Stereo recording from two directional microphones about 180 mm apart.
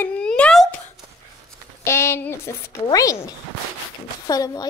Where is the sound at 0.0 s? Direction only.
5° left (ahead or behind).